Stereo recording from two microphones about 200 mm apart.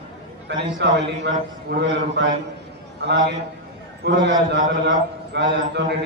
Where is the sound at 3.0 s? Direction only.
55° right (ahead or behind).